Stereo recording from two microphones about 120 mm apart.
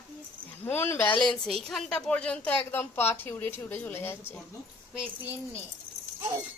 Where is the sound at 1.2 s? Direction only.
5° left (ahead or behind); by 4.2 s 20° left (ahead or behind).